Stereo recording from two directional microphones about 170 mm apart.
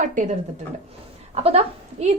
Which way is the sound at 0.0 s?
45° right (ahead or behind).